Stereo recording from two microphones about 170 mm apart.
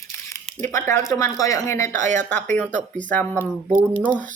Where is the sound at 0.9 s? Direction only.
20° left (ahead or behind).